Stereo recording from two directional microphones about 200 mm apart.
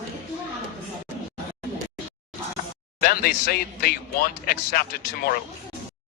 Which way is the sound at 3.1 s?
50° left (ahead or behind).